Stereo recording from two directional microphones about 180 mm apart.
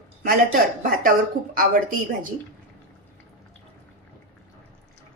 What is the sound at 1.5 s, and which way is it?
Speech, 50° right (ahead or behind).